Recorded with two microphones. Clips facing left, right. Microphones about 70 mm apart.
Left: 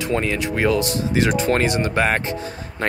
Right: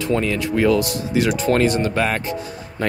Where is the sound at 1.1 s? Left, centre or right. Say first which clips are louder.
Right 1 dB; left.